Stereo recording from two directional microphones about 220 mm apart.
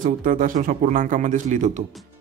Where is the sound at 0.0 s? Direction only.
40° right (ahead or behind).